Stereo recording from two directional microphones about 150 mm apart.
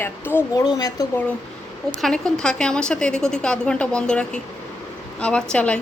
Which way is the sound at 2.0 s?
5° left (ahead or behind).